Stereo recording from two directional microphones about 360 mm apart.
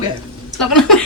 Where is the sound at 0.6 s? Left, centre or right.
Centre.